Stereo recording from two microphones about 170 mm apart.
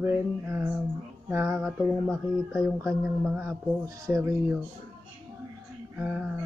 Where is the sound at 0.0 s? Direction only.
15° right (ahead or behind).